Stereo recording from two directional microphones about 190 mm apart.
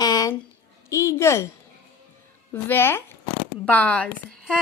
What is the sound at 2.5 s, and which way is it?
A woman's voice, 10° left (ahead or behind).